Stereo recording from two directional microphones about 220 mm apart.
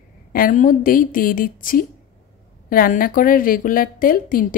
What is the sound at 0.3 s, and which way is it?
A woman's voice, 40° left (ahead or behind).